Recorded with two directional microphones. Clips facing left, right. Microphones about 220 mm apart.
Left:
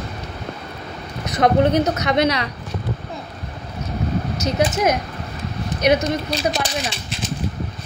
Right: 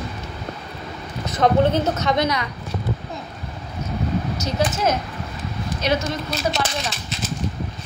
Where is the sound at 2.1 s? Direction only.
70° left (ahead or behind).